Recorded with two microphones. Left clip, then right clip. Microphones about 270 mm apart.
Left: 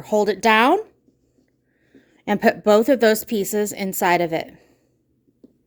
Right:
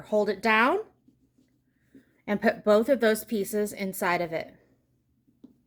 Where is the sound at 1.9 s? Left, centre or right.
Left.